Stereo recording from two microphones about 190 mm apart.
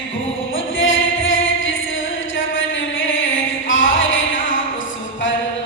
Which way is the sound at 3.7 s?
90° left.